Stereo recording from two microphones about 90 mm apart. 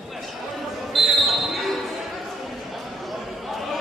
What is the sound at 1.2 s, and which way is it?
Basketball bounce, centre (ahead or behind).